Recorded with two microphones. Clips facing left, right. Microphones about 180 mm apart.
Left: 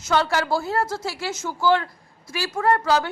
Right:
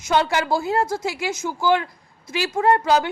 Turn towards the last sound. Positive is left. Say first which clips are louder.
# right 2 dB
turn(degrees=-15)  # may be behind; listen again after turning